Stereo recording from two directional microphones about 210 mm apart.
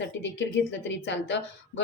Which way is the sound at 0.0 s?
60° left (ahead or behind).